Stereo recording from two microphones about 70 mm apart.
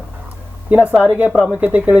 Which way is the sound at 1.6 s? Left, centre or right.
Right.